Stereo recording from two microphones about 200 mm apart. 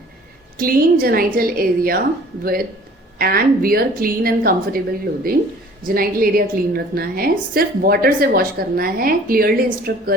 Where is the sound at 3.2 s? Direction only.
50° right (ahead or behind).